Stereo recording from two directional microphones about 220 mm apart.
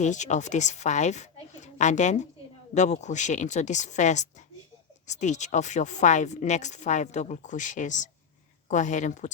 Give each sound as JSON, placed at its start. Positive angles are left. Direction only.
{"t": 0.0, "sound": "a woman's voice", "side_deg": 30}